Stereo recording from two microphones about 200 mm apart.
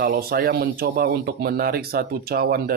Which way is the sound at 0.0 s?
50° right (ahead or behind).